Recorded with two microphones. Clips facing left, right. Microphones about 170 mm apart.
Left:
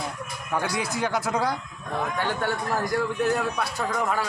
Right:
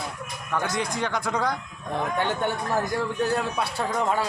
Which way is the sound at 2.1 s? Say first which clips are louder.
Right 2 dB; 20° right (ahead or behind).